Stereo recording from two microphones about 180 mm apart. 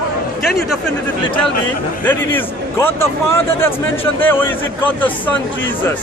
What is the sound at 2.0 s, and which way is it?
Speech, 10° left (ahead or behind).